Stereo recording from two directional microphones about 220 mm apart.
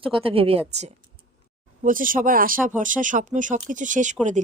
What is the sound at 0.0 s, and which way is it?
Speech, 25° right (ahead or behind).